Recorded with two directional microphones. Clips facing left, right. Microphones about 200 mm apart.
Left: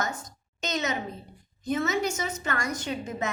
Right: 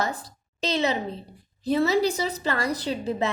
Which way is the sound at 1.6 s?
35° right (ahead or behind).